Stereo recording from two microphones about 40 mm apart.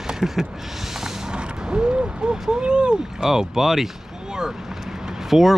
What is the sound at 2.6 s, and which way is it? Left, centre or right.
Speech, right.